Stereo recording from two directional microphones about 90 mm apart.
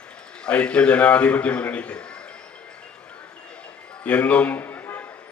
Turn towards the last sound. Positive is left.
turn(degrees=25)  # may be behind; listen again after turning